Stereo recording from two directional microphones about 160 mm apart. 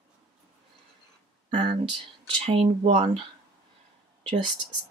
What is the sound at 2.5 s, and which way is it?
Speech, 35° right (ahead or behind).